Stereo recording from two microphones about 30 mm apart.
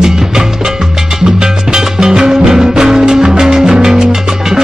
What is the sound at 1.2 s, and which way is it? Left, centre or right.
Music, right.